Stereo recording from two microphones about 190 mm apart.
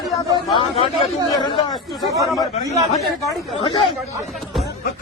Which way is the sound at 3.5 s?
25° left (ahead or behind).